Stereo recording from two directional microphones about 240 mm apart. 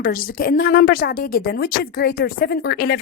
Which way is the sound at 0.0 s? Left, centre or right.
Left.